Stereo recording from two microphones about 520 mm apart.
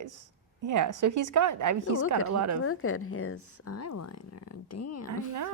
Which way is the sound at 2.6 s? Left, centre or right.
Left.